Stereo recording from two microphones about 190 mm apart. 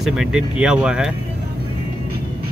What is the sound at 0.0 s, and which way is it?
Speech, 5° right (ahead or behind).